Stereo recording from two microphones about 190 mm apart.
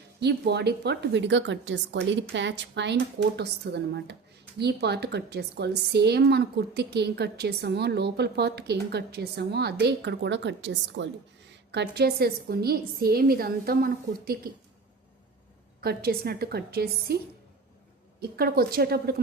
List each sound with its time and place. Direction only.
0.2 s a woman's voice: 60° right (ahead or behind)
15.8 s a woman's voice: 55° right (ahead or behind)
18.2 s a woman's voice: 55° right (ahead or behind)